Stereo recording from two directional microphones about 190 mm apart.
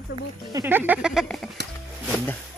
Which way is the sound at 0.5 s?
15° right (ahead or behind).